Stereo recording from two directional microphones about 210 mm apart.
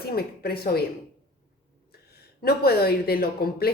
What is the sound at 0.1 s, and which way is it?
Speech, 45° left (ahead or behind).